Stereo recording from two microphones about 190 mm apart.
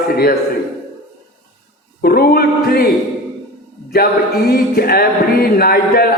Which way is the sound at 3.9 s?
55° left (ahead or behind).